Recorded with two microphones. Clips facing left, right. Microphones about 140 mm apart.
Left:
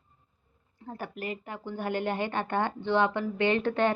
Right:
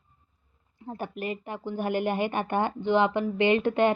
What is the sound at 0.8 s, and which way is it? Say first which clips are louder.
A woman's voice: right 3 dB; 20° right (ahead or behind).